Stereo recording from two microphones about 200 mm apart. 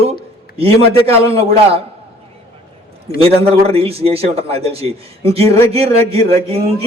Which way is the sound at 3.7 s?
30° right (ahead or behind).